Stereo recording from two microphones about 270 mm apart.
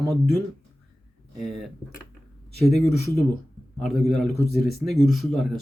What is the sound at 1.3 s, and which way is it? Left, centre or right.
Speech, centre.